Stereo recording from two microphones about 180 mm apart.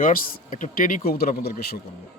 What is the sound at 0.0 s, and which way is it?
A man's voice, 50° left (ahead or behind).